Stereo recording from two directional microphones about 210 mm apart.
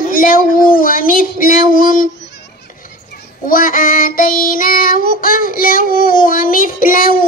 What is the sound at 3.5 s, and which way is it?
Child singing, 40° left (ahead or behind).